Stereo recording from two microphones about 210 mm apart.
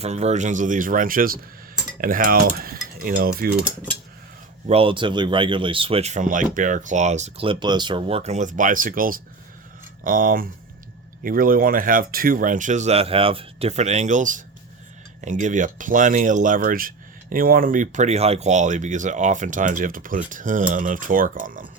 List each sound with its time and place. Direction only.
0.0 s speech: 30° right (ahead or behind)
2.0 s cutlery: 40° right (ahead or behind)
4.7 s speech: 25° right (ahead or behind)